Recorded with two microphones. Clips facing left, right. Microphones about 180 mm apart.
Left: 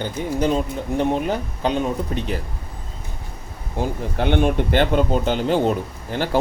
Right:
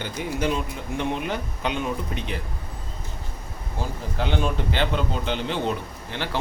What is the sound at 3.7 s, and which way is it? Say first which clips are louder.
Speech: left 6 dB; 60° left (ahead or behind).